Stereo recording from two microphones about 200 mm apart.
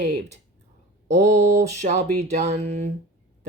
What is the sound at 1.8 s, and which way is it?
Speech, 35° right (ahead or behind).